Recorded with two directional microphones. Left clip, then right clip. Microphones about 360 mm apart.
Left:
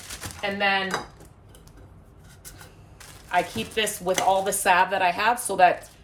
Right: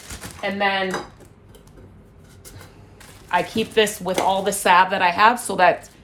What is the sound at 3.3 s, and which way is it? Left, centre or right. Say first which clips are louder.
A woman's voice: right 6 dB; centre.